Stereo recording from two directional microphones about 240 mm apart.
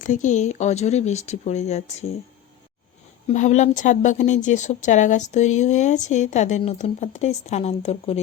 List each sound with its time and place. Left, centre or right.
0.0 s speech: left
3.2 s speech: left